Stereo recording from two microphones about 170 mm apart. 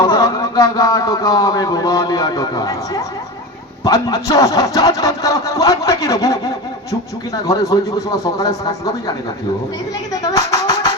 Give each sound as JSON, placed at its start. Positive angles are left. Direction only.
{"t": 0.0, "sound": "a man's voice", "side_deg": 25}
{"t": 7.4, "sound": "a man's voice", "side_deg": 20}
{"t": 10.2, "sound": "speech", "side_deg": 20}